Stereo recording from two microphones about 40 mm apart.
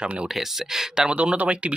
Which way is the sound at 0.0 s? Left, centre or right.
Right.